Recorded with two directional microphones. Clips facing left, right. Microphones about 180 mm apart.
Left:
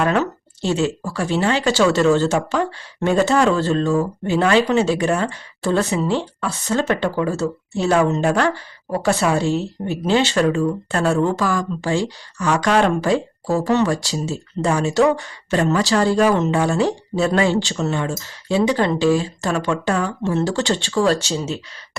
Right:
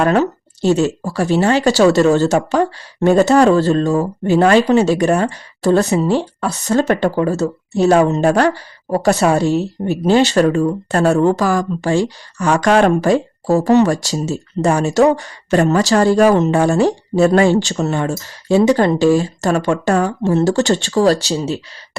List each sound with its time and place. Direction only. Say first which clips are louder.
0.0 s speech: right 5 dB; 40° right (ahead or behind)